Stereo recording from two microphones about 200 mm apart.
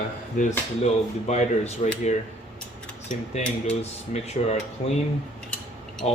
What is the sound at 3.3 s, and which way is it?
Speech, 35° left (ahead or behind).